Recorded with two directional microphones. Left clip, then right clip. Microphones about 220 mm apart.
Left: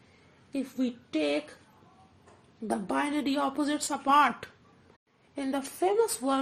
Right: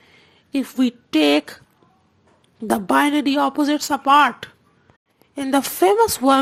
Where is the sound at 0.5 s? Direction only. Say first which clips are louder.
Right 11 dB; 35° right (ahead or behind).